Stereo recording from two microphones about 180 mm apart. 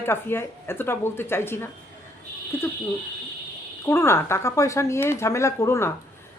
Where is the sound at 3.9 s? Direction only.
15° left (ahead or behind).